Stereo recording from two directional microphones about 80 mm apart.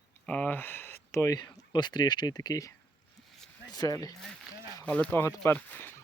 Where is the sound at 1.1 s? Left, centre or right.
Left.